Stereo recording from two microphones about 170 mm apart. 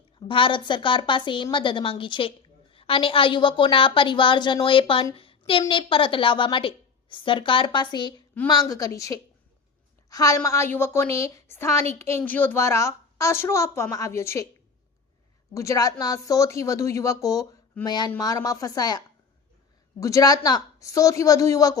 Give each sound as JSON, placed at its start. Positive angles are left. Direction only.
{"t": 0.2, "sound": "a woman's voice", "side_deg": 30}
{"t": 15.5, "sound": "a woman's voice", "side_deg": 20}